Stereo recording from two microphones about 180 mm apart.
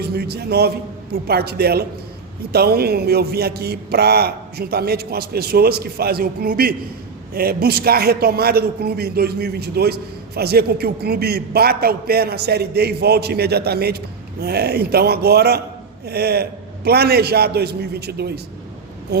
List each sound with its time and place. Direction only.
0.0 s a man's voice: 60° right (ahead or behind)